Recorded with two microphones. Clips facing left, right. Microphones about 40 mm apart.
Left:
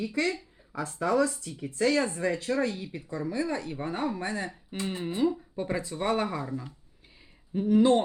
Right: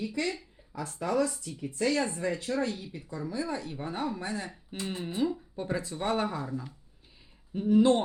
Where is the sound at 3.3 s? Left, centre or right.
Left.